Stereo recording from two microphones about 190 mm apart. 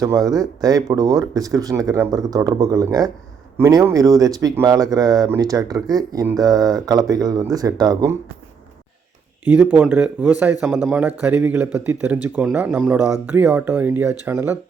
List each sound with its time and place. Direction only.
0.0 s speech: 20° right (ahead or behind)
9.4 s speech: 5° right (ahead or behind)